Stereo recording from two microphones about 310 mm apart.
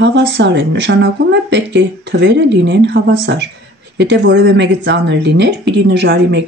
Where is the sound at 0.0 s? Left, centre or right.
Right.